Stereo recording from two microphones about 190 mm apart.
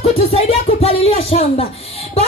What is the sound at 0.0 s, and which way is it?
Music, 30° left (ahead or behind).